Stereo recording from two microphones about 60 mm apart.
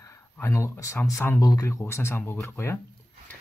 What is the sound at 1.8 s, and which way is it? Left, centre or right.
Speech, left.